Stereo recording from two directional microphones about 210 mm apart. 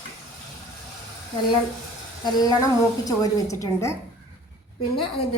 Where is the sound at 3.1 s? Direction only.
15° left (ahead or behind).